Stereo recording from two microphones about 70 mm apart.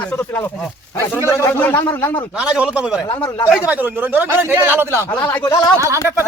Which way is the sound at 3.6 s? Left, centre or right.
Right.